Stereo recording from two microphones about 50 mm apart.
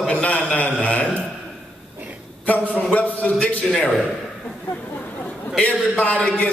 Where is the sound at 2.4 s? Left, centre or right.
Left.